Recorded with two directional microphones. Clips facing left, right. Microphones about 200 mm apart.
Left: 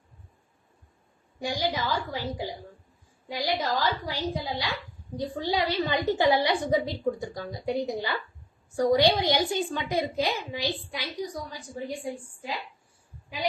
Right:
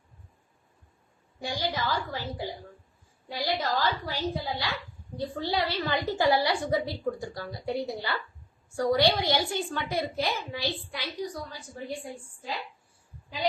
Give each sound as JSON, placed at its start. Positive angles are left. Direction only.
{"t": 1.4, "sound": "a woman's voice", "side_deg": 15}